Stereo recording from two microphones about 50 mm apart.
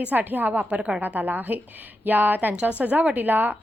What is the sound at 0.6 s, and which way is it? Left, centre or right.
Speech, right.